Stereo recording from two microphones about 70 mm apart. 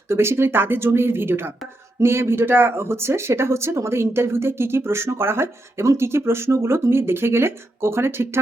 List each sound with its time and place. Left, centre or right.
0.1 s speech: right